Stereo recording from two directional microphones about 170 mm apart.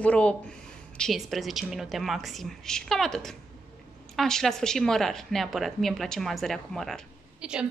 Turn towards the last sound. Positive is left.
turn(degrees=-5)  # may be behind; listen again after turning